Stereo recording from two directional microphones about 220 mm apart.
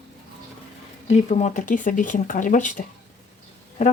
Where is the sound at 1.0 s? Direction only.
30° left (ahead or behind).